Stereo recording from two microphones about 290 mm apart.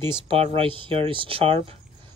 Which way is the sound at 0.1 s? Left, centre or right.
Centre.